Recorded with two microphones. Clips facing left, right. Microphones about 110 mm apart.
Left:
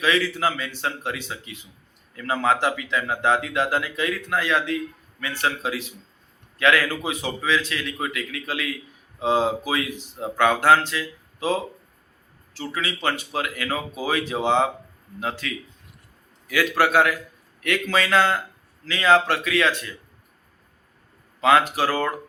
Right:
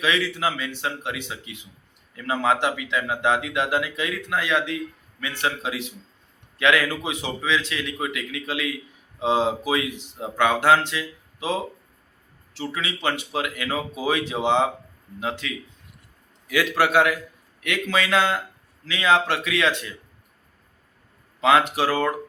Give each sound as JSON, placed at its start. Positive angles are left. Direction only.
{"t": 0.0, "sound": "speech", "side_deg": -15}
{"t": 21.4, "sound": "speech", "side_deg": -20}